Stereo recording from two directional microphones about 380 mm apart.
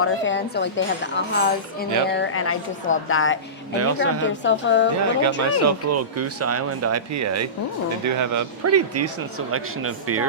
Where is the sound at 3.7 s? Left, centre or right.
Right.